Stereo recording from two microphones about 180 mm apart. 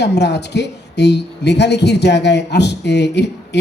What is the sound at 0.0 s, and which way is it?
A woman's voice, 70° left (ahead or behind).